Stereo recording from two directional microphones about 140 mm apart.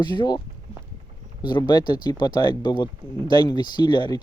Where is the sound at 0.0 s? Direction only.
30° left (ahead or behind).